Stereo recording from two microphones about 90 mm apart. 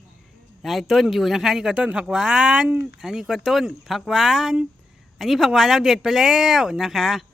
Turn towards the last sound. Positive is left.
turn(degrees=0)  # may be behind; listen again after turning